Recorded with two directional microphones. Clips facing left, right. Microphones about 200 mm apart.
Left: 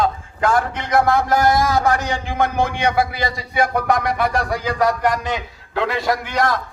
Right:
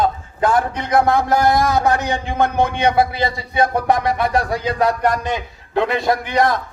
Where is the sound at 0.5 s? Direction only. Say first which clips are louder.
Right 1 dB; 20° right (ahead or behind).